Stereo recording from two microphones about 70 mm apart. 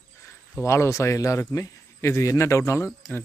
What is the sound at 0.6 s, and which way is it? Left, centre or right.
Speech, left.